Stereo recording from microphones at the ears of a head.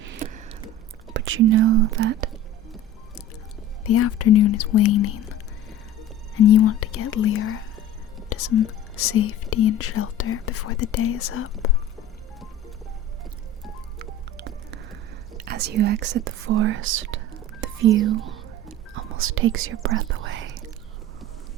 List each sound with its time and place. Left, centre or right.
0.0 s a sound: right
1.1 s speech: right
3.8 s speech: left
14.0 s music: right
15.4 s speech: right